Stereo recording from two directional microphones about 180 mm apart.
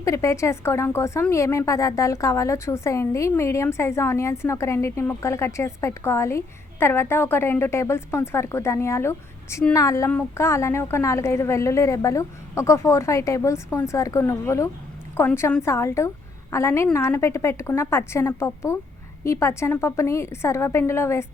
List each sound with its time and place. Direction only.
0.0 s a woman's voice: 15° left (ahead or behind)